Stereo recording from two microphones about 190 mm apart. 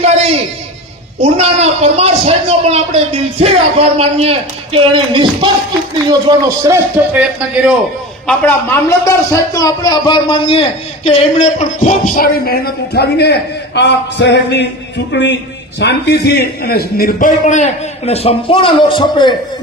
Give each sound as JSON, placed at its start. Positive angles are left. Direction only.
{"t": 0.0, "sound": "a sound", "side_deg": -35}
{"t": 1.2, "sound": "a woman's voice", "side_deg": -35}
{"t": 8.3, "sound": "a man's voice", "side_deg": 10}